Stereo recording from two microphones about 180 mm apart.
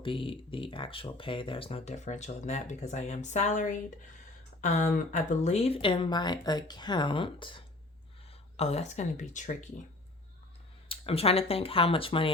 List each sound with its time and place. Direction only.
0.0 s speech: 30° left (ahead or behind)
10.8 s speech: 30° left (ahead or behind)